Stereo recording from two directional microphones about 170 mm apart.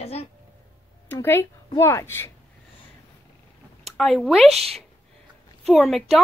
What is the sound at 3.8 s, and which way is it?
Speech, centre (ahead or behind).